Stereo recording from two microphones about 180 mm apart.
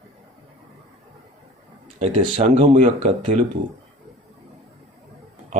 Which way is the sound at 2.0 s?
40° right (ahead or behind).